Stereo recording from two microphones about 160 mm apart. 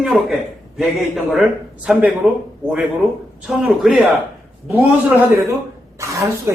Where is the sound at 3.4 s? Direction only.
Centre (ahead or behind).